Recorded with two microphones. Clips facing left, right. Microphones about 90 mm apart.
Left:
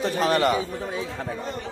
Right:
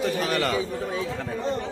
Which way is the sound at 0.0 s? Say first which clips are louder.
Left 3 dB; 25° left (ahead or behind).